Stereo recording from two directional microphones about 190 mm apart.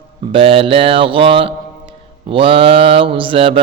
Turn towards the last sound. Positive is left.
turn(degrees=-30)  # may be behind; listen again after turning